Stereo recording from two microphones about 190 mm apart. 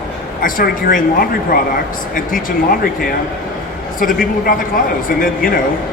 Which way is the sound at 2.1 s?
50° left (ahead or behind).